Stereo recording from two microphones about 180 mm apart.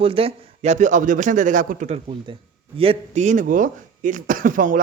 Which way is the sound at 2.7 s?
30° right (ahead or behind).